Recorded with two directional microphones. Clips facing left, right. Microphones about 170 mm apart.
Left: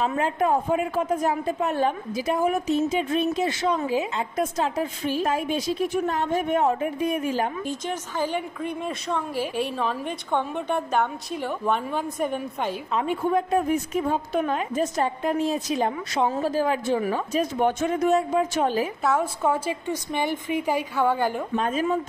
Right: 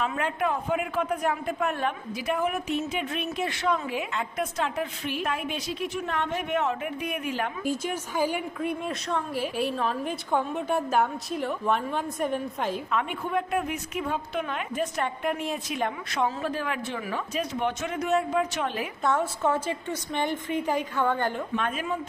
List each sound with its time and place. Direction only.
0.0 s a man's voice: 35° left (ahead or behind)
6.8 s a man's voice: 30° left (ahead or behind)
7.6 s a woman's voice: 10° right (ahead or behind)
12.9 s a man's voice: 35° left (ahead or behind)
19.0 s a woman's voice: 10° left (ahead or behind)
21.5 s a man's voice: 35° left (ahead or behind)